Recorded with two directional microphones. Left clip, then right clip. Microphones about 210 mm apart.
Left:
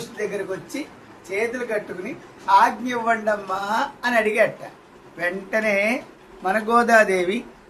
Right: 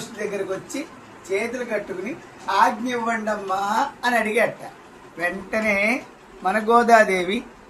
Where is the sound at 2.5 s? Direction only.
20° left (ahead or behind).